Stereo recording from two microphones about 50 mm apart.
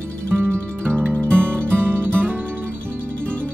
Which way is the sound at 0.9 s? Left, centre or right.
Right.